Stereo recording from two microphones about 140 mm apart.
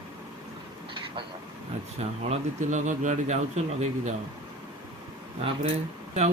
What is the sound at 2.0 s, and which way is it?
Speech, 55° right (ahead or behind).